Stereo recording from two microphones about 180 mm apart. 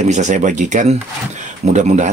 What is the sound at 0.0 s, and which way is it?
Speech, 40° right (ahead or behind).